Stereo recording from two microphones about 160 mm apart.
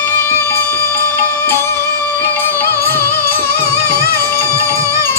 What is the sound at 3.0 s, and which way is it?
Music, 75° left (ahead or behind).